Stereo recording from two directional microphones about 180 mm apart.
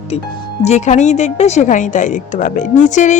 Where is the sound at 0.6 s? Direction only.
40° left (ahead or behind).